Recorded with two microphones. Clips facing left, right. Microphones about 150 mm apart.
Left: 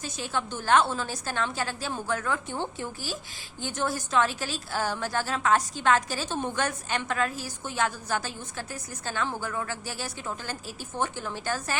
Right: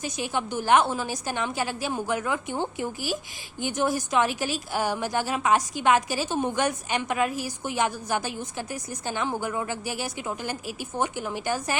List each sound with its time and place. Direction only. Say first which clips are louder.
0.0 s a woman's voice: right 3 dB; 15° right (ahead or behind)